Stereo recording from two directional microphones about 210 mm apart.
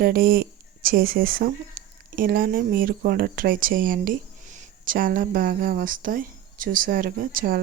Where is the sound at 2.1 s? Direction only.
45° right (ahead or behind).